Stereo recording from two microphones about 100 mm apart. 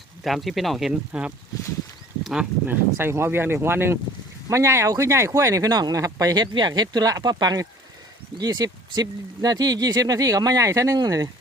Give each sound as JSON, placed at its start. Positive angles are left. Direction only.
{"t": 0.3, "sound": "speech", "side_deg": 0}
{"t": 2.6, "sound": "speech", "side_deg": -25}